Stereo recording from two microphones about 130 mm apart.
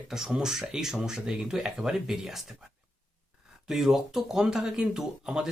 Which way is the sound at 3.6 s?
Centre (ahead or behind).